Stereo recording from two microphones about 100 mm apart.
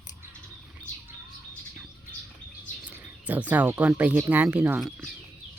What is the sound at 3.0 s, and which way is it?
Speech, 15° right (ahead or behind).